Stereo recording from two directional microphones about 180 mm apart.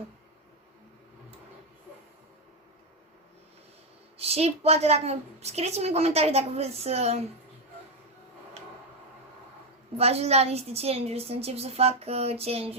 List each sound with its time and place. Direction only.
4.2 s a woman's voice: 35° right (ahead or behind)
10.0 s a woman's voice: 35° right (ahead or behind)